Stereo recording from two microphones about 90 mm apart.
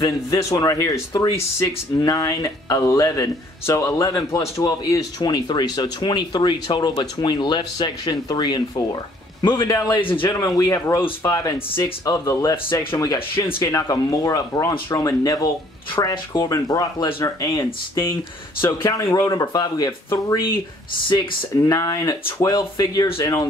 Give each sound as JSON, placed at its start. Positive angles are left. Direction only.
{"t": 0.0, "sound": "speech", "side_deg": 35}
{"t": 5.2, "sound": "speech", "side_deg": 55}
{"t": 9.7, "sound": "speech", "side_deg": 40}
{"t": 9.9, "sound": "a man's voice", "side_deg": 70}
{"t": 10.4, "sound": "speech", "side_deg": 45}
{"t": 21.5, "sound": "speech", "side_deg": 40}